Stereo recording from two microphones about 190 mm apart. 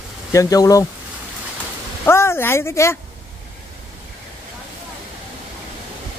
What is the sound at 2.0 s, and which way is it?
Speech, 15° left (ahead or behind).